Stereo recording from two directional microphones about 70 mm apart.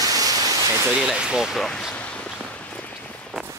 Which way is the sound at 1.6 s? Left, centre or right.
Centre.